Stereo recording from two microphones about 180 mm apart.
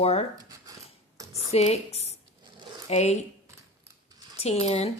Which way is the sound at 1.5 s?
35° left (ahead or behind).